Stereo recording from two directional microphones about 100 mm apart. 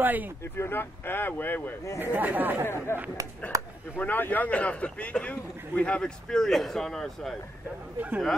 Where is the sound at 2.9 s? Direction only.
25° left (ahead or behind).